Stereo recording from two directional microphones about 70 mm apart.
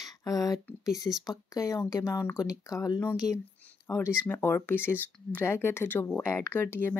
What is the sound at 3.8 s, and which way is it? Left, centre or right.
Speech, left.